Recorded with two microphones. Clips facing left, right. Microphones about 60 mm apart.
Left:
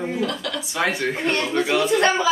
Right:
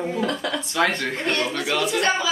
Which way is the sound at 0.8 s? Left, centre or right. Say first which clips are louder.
Even; centre.